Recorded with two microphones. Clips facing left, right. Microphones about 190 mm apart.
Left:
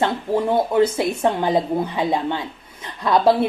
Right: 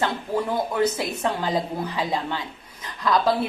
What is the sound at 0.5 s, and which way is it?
A woman's voice, 25° left (ahead or behind).